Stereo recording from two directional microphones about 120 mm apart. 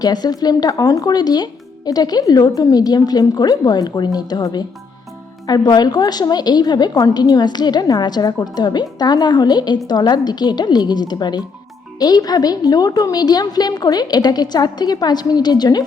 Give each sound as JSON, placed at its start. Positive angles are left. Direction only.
{"t": 0.0, "sound": "a woman's voice", "side_deg": 35}